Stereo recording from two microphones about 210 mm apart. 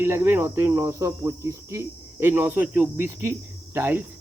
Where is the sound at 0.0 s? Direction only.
10° right (ahead or behind).